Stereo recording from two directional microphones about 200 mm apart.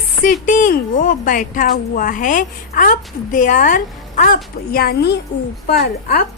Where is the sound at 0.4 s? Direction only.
40° left (ahead or behind).